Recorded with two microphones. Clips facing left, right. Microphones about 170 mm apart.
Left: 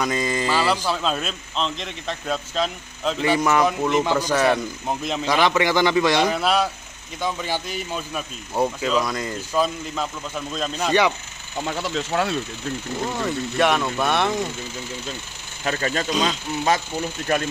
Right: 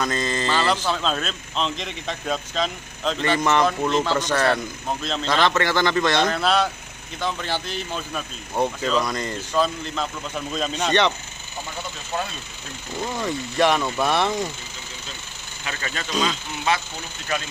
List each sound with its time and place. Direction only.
0.0 s speech: 10° left (ahead or behind)
11.6 s speech: 75° left (ahead or behind)
13.0 s speech: centre (ahead or behind)
15.6 s speech: 40° left (ahead or behind)